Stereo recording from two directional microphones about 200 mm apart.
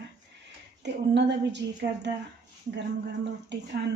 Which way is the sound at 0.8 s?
60° right (ahead or behind).